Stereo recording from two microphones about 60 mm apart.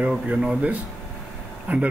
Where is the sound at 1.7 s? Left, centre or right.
Right.